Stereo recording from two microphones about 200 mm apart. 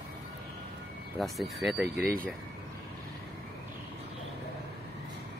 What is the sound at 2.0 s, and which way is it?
Speech, 50° right (ahead or behind).